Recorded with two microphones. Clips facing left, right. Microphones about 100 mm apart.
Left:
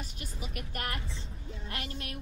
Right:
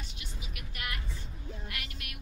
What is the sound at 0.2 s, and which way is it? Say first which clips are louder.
Vehicle: left 6 dB; 40° left (ahead or behind).